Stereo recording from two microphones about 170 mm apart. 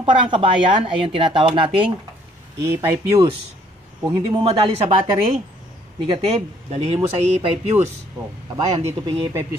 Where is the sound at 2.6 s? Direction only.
15° right (ahead or behind).